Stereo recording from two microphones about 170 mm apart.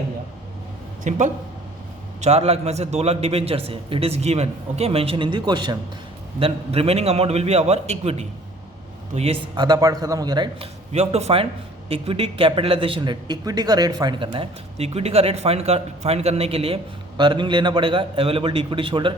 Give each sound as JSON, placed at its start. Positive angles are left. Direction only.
{"t": 1.1, "sound": "speech", "side_deg": -45}
{"t": 2.2, "sound": "a man's voice", "side_deg": -40}